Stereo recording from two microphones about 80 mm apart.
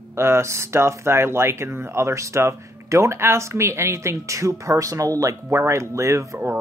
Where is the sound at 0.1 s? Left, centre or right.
Right.